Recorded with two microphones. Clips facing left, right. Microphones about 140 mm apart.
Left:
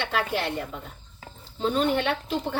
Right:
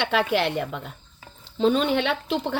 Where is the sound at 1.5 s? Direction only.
90° right.